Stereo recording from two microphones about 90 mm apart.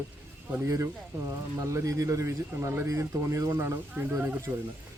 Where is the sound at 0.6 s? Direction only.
35° right (ahead or behind).